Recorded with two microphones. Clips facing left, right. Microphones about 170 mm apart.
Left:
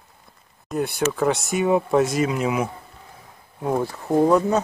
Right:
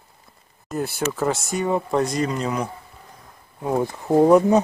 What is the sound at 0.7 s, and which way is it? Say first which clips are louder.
Speech: left 2 dB; centre (ahead or behind).